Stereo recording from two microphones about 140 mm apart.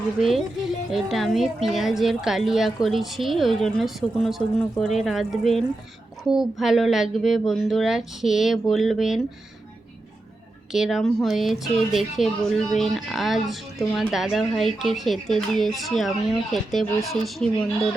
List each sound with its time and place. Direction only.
0.2 s speech: centre (ahead or behind)
10.7 s speech: centre (ahead or behind)